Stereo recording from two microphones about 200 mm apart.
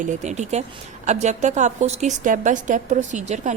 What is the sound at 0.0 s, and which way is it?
A woman's voice, 35° right (ahead or behind).